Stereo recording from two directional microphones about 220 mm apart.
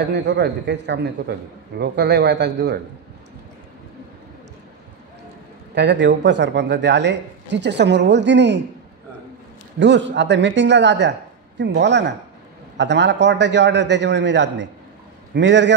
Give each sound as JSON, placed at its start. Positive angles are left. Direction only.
{"t": 0.0, "sound": "speech", "side_deg": -50}
{"t": 5.8, "sound": "speech", "side_deg": -55}
{"t": 9.8, "sound": "speech", "side_deg": -55}